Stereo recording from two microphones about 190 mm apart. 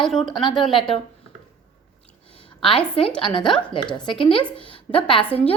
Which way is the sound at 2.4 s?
25° left (ahead or behind).